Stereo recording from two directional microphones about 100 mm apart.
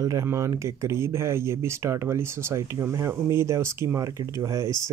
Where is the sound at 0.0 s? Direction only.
30° right (ahead or behind).